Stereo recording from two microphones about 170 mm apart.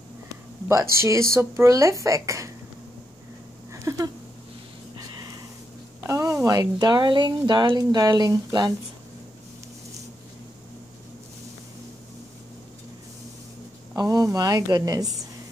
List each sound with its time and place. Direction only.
0.9 s speech: 15° right (ahead or behind)
3.7 s a sound: 20° right (ahead or behind)
6.0 s speech: 20° right (ahead or behind)
13.9 s speech: 20° right (ahead or behind)